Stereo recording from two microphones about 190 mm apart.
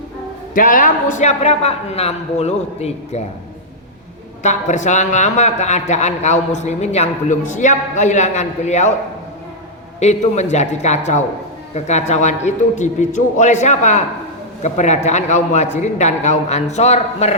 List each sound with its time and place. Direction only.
0.5 s a man's voice: 45° left (ahead or behind)
4.4 s a man's voice: 40° left (ahead or behind)
10.0 s a man's voice: 35° left (ahead or behind)